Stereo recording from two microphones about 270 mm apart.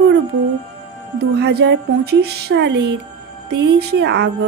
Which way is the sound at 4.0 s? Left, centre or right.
Right.